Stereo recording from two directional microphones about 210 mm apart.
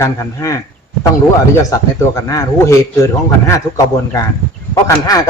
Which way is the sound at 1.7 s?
15° left (ahead or behind).